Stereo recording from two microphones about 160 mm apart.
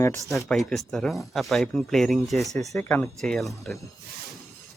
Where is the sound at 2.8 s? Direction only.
10° left (ahead or behind).